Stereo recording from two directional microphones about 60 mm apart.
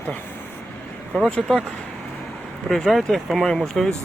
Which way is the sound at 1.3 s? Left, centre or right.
Centre.